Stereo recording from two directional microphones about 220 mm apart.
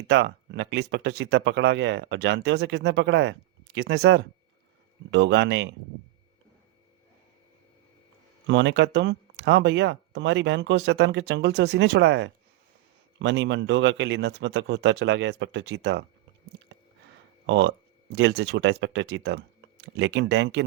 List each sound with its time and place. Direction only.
0.1 s speech: 50° right (ahead or behind)
8.4 s speech: 55° right (ahead or behind)
17.4 s speech: 55° right (ahead or behind)